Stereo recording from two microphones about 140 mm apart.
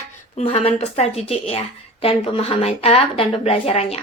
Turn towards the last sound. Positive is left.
turn(degrees=45)  # may be behind; listen again after turning